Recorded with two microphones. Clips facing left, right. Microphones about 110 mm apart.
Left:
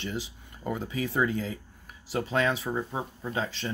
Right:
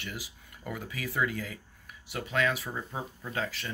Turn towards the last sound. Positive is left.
turn(degrees=25)  # may be behind; listen again after turning